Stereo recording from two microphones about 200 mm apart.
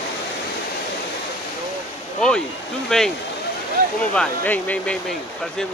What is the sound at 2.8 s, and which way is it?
Speech, centre (ahead or behind).